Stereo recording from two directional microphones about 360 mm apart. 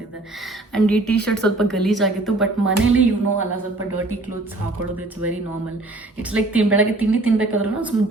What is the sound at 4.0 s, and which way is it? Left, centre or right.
Speech, right.